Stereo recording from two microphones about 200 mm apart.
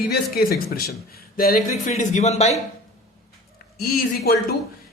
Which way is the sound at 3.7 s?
50° left (ahead or behind).